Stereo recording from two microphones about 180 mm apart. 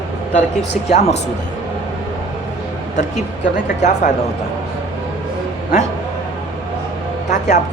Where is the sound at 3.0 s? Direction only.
40° left (ahead or behind).